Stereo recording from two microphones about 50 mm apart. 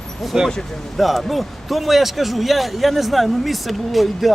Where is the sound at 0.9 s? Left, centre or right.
Centre.